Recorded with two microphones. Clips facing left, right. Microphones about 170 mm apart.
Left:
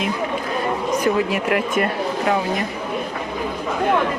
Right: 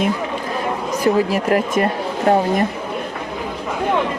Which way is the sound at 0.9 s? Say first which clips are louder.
Right 4 dB; 35° right (ahead or behind).